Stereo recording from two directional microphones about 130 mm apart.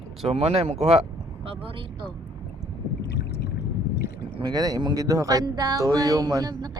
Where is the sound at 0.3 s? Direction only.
50° right (ahead or behind).